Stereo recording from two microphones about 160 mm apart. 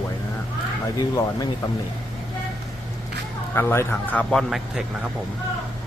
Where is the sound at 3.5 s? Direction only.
15° left (ahead or behind); by 4.8 s centre (ahead or behind).